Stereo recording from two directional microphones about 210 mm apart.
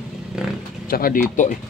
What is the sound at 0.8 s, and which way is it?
Speech, 45° left (ahead or behind).